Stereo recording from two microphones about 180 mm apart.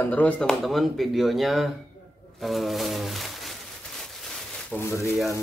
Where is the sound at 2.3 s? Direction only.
Centre (ahead or behind).